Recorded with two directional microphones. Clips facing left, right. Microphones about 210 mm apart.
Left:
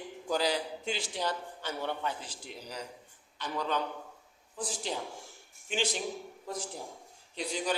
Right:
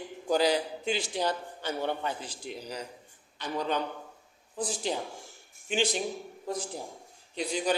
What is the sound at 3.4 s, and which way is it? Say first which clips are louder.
Speech: right 2 dB; 15° right (ahead or behind).